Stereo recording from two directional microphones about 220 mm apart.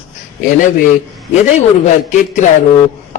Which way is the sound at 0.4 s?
35° left (ahead or behind).